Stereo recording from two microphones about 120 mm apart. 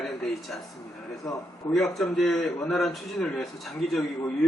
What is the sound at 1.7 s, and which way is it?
A man's voice, 5° left (ahead or behind).